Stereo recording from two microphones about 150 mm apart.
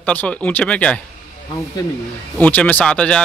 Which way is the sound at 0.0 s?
10° left (ahead or behind).